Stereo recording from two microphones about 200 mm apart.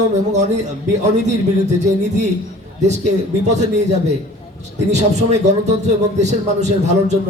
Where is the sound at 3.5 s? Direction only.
35° right (ahead or behind).